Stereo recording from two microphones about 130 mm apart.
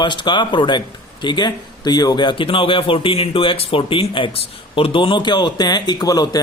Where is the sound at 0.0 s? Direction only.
35° left (ahead or behind).